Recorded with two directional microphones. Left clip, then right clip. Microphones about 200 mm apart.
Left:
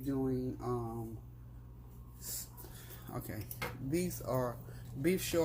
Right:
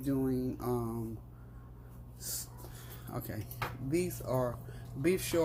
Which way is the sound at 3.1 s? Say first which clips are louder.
Right 2 dB; 5° right (ahead or behind).